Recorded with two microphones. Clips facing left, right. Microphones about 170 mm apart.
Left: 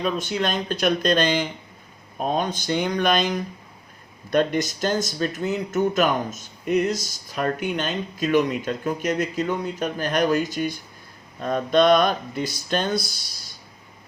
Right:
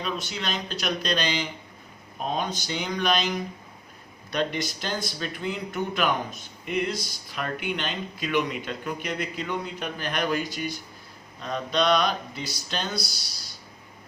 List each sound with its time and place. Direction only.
0.0 s speech: 50° left (ahead or behind)